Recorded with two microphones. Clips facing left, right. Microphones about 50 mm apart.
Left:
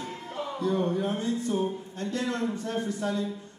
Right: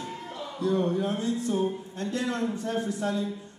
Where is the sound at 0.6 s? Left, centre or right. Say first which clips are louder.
Right 2 dB; centre.